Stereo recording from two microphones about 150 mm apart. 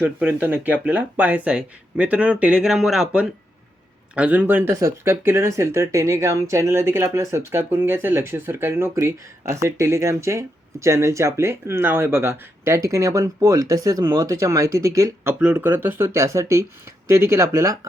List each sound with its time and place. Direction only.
0.0 s speech: 10° right (ahead or behind)